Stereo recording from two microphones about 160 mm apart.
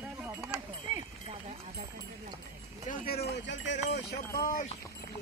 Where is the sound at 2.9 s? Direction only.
75° left (ahead or behind).